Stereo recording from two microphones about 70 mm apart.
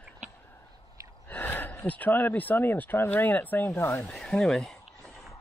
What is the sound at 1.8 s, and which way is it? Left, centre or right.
Speech, left.